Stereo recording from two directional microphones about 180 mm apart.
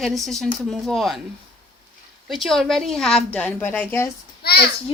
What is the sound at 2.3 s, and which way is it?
A woman's voice, centre (ahead or behind).